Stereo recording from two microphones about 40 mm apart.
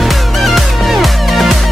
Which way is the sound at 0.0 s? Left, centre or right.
Centre.